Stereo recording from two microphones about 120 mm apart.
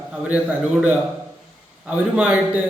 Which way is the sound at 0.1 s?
10° right (ahead or behind).